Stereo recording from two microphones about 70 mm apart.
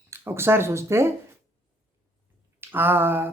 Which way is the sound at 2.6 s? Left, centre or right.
Right.